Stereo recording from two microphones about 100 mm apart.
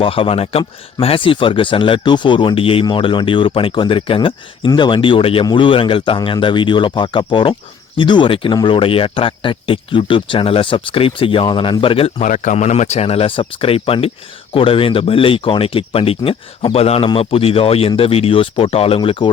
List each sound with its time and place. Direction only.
0.0 s speech: 65° left (ahead or behind)
12.7 s speech: 90° left; by 16.4 s 70° left (ahead or behind)
16.7 s a man's voice: 90° left
17.2 s speech: 70° left (ahead or behind)